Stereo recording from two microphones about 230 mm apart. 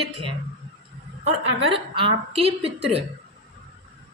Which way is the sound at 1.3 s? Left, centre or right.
Right.